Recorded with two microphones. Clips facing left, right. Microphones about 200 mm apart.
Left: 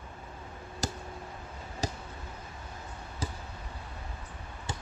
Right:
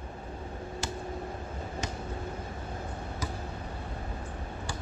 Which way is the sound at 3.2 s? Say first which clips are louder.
Even; 30° left (ahead or behind).